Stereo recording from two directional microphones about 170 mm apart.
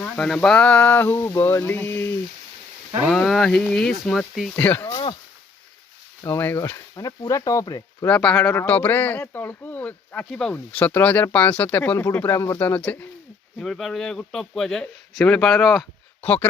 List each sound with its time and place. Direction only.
0.0 s speech: 5° left (ahead or behind)
3.1 s a man's voice: centre (ahead or behind)
6.2 s speech: 10° left (ahead or behind)
8.0 s a man's voice: 5° left (ahead or behind)
16.2 s speech: 10° left (ahead or behind)